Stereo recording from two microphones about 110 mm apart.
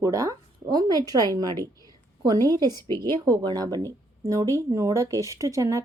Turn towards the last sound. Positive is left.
turn(degrees=-30)  # may be behind; listen again after turning